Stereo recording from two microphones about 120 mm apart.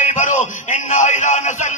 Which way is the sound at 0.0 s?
90° left.